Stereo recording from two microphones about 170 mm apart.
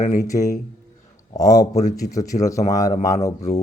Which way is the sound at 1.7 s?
45° left (ahead or behind).